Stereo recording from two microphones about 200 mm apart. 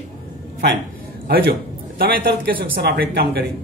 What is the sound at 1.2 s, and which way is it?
A man's voice, 50° right (ahead or behind).